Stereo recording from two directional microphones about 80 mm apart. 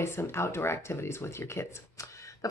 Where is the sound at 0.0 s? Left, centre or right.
Left.